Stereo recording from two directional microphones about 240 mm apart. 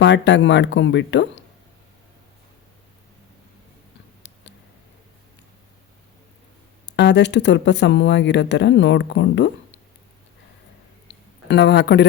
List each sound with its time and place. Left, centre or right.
0.0 s speech: left
4.2 s a sound: left
6.8 s speech: left
11.4 s speech: left